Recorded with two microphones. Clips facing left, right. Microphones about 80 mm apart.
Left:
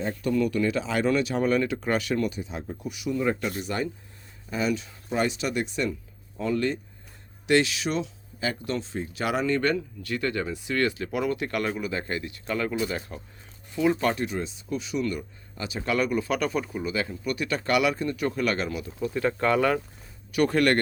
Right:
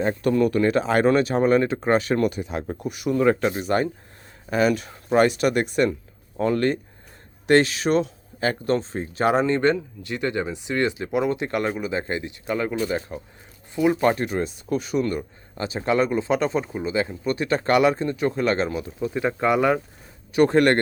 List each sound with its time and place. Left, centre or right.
0.2 s speech: right
2.2 s speech: right
3.2 s speech: right
3.5 s speech: right
4.4 s speech: right
14.3 s speech: right
18.9 s speech: centre
20.3 s speech: right